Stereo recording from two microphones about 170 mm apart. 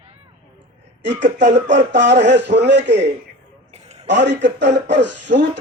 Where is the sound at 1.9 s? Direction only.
90° right.